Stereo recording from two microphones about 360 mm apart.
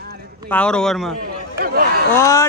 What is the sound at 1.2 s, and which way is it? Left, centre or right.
Chatter, right.